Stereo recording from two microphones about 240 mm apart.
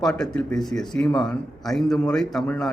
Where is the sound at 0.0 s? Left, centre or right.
Centre.